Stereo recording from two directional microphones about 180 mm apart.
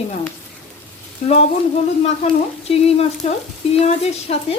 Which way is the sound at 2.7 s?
35° left (ahead or behind).